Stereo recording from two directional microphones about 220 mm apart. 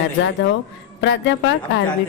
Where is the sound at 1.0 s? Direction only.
55° left (ahead or behind).